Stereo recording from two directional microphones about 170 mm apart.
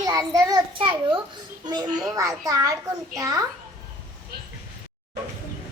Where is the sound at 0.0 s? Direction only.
20° right (ahead or behind).